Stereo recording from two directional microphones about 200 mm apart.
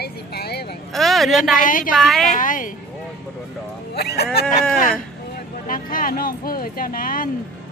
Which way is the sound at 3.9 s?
55° left (ahead or behind).